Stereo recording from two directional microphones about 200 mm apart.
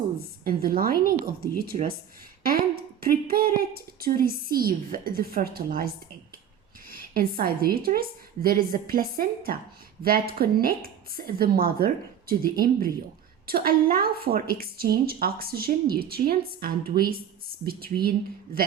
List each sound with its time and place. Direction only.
0.4 s speech: 45° right (ahead or behind)
6.9 s speech: 45° right (ahead or behind)